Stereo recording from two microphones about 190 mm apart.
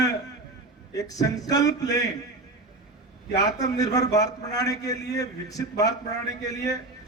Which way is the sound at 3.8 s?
20° left (ahead or behind).